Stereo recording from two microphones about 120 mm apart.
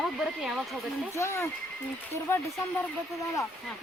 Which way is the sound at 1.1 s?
25° left (ahead or behind).